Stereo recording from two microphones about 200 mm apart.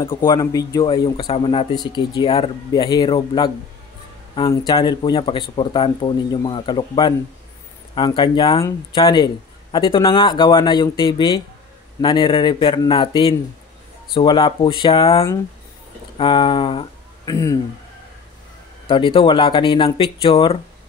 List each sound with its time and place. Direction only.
0.0 s speech: 20° left (ahead or behind)
18.9 s speech: 25° left (ahead or behind)